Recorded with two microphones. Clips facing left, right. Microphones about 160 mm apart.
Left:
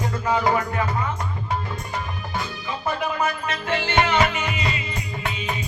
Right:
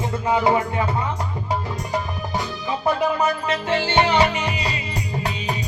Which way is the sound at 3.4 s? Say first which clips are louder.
Right 3 dB; 30° right (ahead or behind).